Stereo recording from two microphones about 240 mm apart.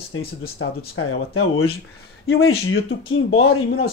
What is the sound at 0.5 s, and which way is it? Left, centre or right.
Speech, left.